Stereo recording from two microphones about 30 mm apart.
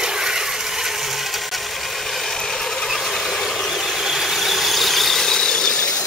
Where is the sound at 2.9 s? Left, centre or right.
Centre; by 5.8 s left.